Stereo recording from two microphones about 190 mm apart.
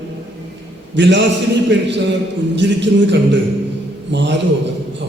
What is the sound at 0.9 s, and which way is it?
A man's voice, 70° right (ahead or behind).